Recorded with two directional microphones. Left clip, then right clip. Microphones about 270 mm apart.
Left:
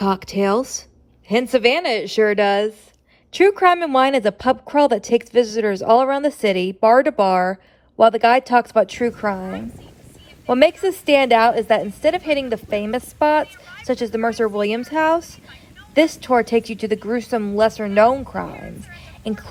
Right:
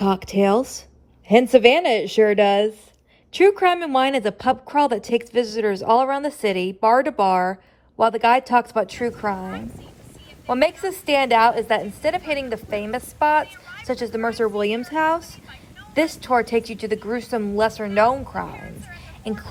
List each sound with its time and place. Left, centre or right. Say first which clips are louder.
0.3 s a woman's voice: even; left
9.5 s a woman's voice: left 3 dB; centre
10.5 s a woman's voice: left 5 dB; left
16.3 s a woman's voice: left 3 dB; left
18.5 s a woman's voice: left 2 dB; centre
19.3 s a woman's voice: left 2 dB; left